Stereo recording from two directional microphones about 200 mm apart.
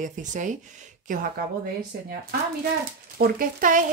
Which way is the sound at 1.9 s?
55° right (ahead or behind).